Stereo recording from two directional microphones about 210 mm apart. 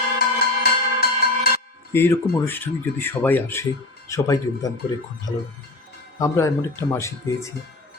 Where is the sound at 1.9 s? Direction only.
10° left (ahead or behind).